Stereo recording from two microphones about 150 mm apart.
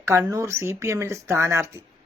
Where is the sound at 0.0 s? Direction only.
20° right (ahead or behind).